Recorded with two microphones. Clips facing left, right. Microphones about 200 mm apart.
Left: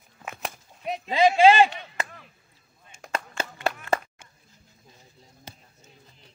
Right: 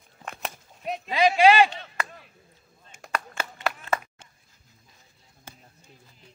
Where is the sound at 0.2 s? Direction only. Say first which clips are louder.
Even; centre (ahead or behind).